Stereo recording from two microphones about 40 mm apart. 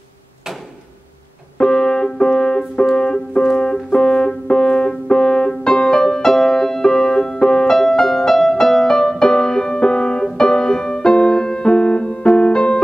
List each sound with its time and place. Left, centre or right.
1.6 s music: left